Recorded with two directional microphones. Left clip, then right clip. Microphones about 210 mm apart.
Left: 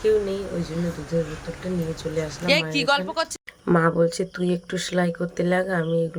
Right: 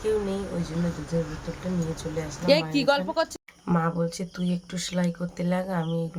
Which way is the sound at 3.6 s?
15° left (ahead or behind).